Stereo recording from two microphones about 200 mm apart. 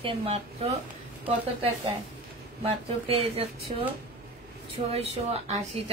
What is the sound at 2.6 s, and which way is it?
Speech, 30° right (ahead or behind).